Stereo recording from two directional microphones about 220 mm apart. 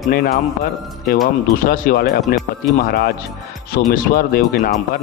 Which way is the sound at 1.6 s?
40° left (ahead or behind).